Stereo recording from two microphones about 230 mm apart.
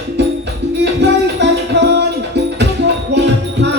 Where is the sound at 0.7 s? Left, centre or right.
Right.